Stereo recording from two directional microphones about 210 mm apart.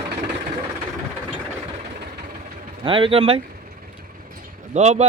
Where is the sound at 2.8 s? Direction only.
25° right (ahead or behind).